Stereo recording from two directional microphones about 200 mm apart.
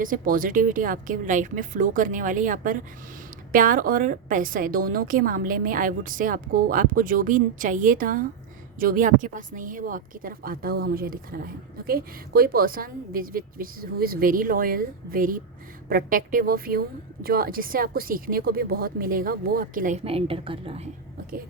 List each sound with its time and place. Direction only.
0.0 s a woman's voice: 45° right (ahead or behind)
20.1 s a woman's voice: 30° right (ahead or behind)